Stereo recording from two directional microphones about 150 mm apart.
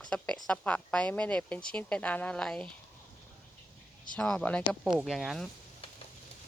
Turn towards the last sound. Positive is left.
turn(degrees=0)  # may be behind; listen again after turning